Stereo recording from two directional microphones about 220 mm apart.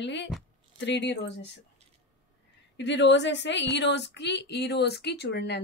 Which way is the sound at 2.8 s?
55° left (ahead or behind).